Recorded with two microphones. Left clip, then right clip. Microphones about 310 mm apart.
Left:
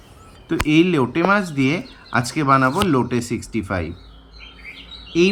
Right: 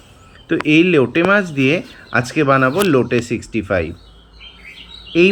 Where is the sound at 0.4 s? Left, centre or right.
Centre.